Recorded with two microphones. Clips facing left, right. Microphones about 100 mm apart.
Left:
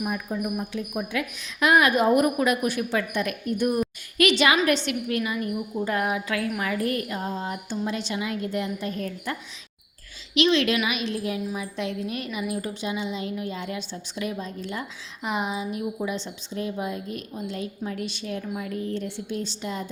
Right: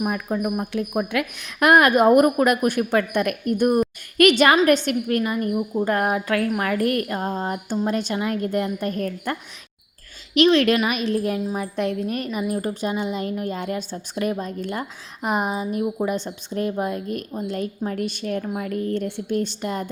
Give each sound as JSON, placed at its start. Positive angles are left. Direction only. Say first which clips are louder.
{"t": 0.0, "sound": "a woman's voice", "louder": "right 5 dB", "side_deg": -65}